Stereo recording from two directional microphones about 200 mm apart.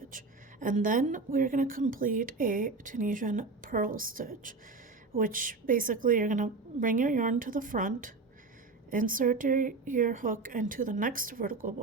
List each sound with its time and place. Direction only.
0.6 s a woman's voice: 40° right (ahead or behind)